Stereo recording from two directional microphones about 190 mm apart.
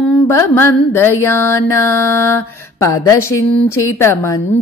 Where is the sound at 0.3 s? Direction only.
15° left (ahead or behind).